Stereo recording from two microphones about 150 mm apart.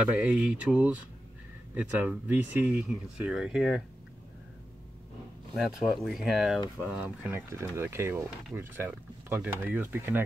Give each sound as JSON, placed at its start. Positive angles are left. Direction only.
{"t": 0.0, "sound": "speech", "side_deg": -10}
{"t": 5.6, "sound": "speech", "side_deg": 0}